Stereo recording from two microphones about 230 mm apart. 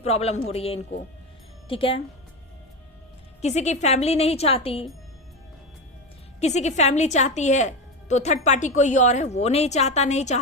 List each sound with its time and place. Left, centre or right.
0.0 s a woman's voice: left
3.4 s a woman's voice: left
6.4 s a woman's voice: left